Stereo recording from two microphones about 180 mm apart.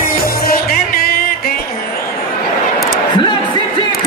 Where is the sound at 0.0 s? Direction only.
55° left (ahead or behind).